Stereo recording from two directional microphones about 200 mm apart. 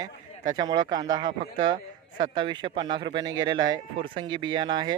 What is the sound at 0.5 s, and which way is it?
Speech, 20° right (ahead or behind).